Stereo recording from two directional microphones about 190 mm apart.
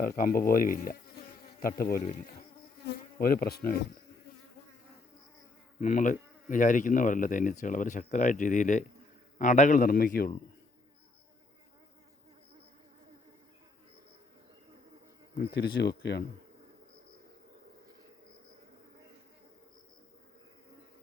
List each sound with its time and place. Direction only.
0.2 s speech: 50° left (ahead or behind)
2.8 s insect: 50° left (ahead or behind)
5.8 s speech: 45° left (ahead or behind)
15.4 s speech: 60° left (ahead or behind)